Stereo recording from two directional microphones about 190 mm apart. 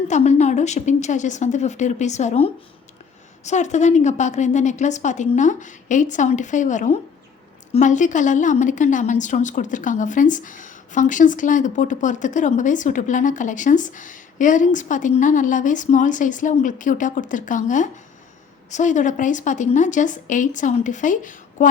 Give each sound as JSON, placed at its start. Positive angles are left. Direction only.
{"t": 0.1, "sound": "a woman's voice", "side_deg": 35}